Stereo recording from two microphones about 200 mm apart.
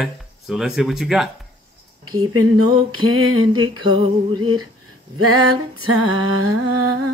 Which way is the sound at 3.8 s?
25° right (ahead or behind).